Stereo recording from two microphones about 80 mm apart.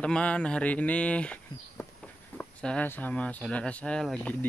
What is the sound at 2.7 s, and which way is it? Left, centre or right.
Speech, centre.